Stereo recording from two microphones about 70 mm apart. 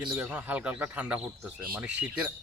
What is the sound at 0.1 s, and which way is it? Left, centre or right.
Speech, right.